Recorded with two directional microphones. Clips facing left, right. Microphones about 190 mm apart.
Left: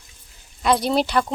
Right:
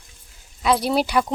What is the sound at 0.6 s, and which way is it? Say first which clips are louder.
Speech: even; 5° right (ahead or behind).